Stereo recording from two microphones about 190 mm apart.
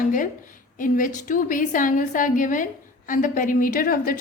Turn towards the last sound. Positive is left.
turn(degrees=50)  # may be behind; listen again after turning